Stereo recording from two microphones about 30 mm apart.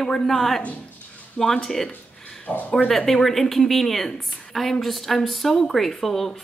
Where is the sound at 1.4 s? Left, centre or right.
Left.